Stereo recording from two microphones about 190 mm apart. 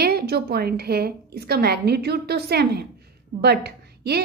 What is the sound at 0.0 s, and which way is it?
A woman's voice, 55° right (ahead or behind).